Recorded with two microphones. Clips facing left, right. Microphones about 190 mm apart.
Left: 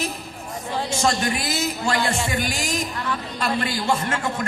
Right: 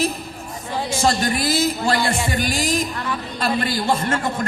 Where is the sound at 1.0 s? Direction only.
35° right (ahead or behind).